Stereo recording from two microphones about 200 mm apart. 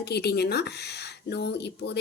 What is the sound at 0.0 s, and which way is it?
Speech, 55° left (ahead or behind).